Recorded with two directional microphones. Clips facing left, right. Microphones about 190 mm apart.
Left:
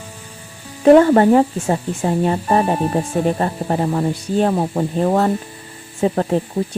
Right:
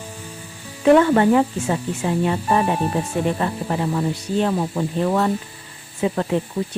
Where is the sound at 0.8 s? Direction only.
40° left (ahead or behind).